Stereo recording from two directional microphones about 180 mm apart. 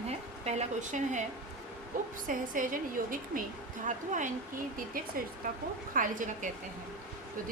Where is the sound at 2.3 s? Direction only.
45° right (ahead or behind).